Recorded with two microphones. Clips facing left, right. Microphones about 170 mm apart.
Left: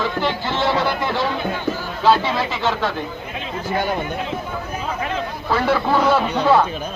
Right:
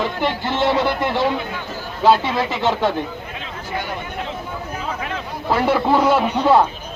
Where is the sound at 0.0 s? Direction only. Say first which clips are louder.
Even; 20° right (ahead or behind).